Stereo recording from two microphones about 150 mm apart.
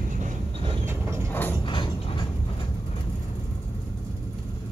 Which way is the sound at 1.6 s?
30° left (ahead or behind).